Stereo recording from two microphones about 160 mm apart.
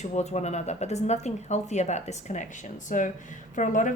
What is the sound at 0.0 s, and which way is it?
A woman's voice, 45° left (ahead or behind).